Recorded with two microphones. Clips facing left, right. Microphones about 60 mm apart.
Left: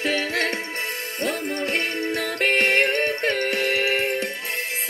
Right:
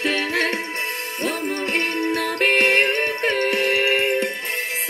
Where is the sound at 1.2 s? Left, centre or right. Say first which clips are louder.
Right 1 dB; centre.